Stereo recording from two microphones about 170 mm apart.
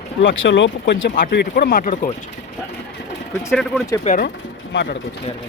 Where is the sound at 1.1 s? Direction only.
65° left (ahead or behind); by 2.1 s 50° left (ahead or behind).